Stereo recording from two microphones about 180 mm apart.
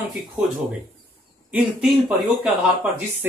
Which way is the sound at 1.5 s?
5° right (ahead or behind).